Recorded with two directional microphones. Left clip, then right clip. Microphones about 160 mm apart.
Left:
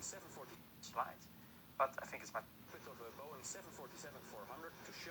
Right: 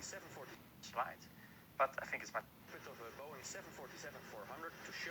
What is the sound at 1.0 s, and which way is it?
Speech, 25° right (ahead or behind).